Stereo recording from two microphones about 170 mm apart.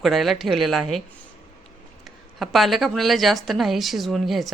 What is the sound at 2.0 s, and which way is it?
Speech, centre (ahead or behind).